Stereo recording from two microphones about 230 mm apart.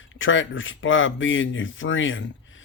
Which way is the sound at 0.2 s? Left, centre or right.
Left.